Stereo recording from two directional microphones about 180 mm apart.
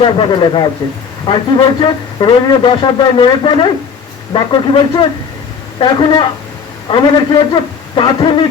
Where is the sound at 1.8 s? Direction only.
25° left (ahead or behind).